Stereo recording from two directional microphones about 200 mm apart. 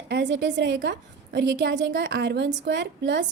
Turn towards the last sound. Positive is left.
turn(degrees=-60)  # may be behind; listen again after turning